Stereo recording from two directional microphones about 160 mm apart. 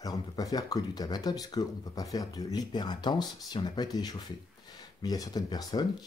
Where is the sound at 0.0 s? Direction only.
25° left (ahead or behind).